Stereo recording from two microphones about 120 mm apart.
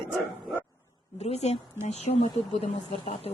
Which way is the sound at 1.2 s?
65° left (ahead or behind).